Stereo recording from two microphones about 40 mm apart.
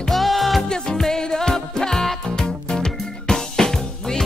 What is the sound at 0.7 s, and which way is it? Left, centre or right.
Music, centre.